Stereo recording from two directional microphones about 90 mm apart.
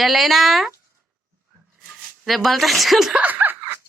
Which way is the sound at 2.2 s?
Centre (ahead or behind).